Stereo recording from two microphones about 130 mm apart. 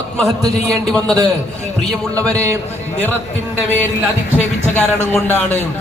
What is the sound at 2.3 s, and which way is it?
Speech, 20° right (ahead or behind).